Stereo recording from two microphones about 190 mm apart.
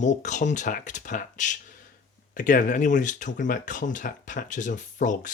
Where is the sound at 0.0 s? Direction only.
40° left (ahead or behind).